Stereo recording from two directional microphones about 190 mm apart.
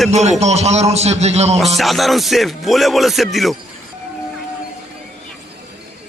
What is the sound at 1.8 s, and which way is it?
Speech, centre (ahead or behind).